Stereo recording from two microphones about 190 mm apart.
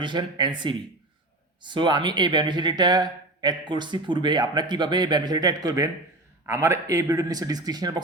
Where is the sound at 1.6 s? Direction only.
25° right (ahead or behind).